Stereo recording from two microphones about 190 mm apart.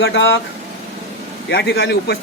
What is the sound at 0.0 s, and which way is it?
Speech, 90° left.